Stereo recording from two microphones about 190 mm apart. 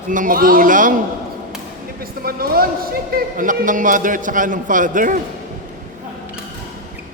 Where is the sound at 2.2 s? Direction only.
50° right (ahead or behind).